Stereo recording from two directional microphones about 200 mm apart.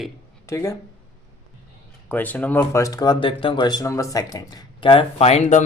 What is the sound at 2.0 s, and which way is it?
Speech, 10° left (ahead or behind).